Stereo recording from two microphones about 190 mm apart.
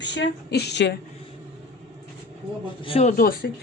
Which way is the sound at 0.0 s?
70° left (ahead or behind).